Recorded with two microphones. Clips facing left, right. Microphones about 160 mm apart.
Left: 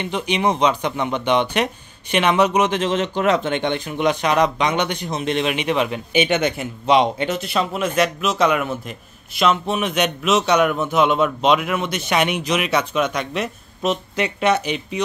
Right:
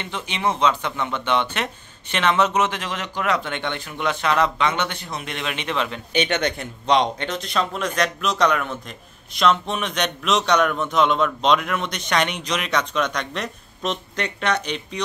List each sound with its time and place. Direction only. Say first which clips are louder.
0.0 s speech: left 5 dB; 15° left (ahead or behind)